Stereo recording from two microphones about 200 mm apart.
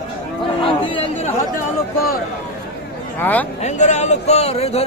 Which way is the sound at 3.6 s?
35° left (ahead or behind).